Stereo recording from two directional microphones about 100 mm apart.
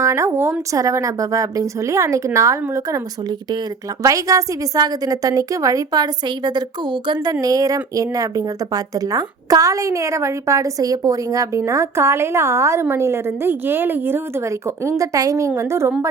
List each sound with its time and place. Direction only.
0.0 s a woman's voice: 30° right (ahead or behind)
4.0 s a woman's voice: 35° right (ahead or behind)
14.8 s a woman's voice: 30° right (ahead or behind)